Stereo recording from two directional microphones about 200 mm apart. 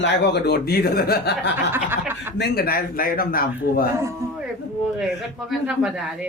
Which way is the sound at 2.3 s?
55° left (ahead or behind).